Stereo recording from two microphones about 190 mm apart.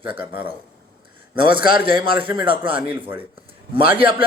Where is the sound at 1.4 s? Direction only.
25° right (ahead or behind).